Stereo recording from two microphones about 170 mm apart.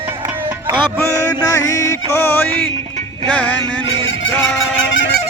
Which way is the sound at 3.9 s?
90° left.